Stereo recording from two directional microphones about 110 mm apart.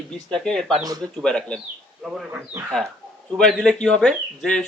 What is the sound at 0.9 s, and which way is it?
Speech, 35° right (ahead or behind).